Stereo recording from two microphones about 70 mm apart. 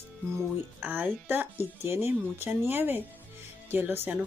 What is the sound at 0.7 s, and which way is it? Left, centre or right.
A woman's voice, right.